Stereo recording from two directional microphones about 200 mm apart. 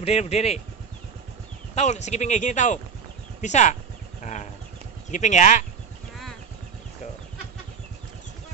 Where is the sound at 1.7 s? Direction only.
35° left (ahead or behind).